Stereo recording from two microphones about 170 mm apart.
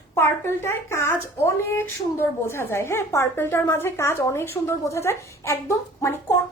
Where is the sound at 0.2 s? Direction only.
15° left (ahead or behind).